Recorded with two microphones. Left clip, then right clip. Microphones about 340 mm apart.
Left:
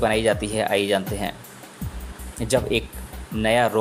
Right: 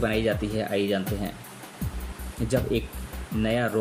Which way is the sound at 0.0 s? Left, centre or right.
Centre.